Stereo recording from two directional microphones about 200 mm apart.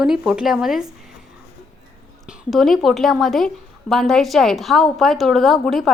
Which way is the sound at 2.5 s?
Centre (ahead or behind).